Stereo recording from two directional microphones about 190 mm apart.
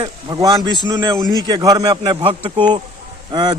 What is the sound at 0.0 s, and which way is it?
A man's voice, 20° right (ahead or behind).